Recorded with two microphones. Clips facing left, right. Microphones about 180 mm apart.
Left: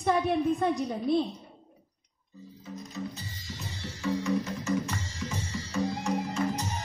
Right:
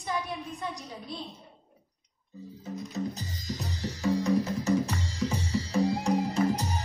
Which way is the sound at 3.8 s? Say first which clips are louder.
Right 3 dB; 35° right (ahead or behind).